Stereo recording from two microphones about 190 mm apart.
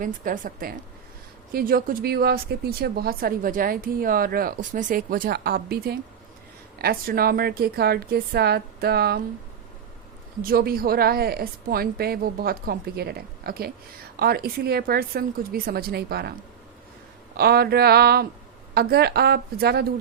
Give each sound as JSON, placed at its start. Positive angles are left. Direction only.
{"t": 0.0, "sound": "a woman's voice", "side_deg": -45}
{"t": 10.4, "sound": "speech", "side_deg": -50}
{"t": 17.3, "sound": "a woman's voice", "side_deg": -55}